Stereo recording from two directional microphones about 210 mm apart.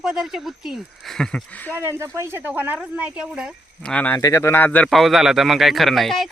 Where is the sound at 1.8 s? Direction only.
10° right (ahead or behind).